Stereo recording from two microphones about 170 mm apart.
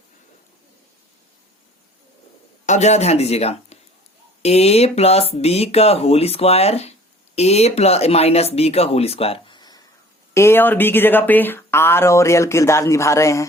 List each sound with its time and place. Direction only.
2.6 s speech: 40° left (ahead or behind); by 13.4 s 15° left (ahead or behind)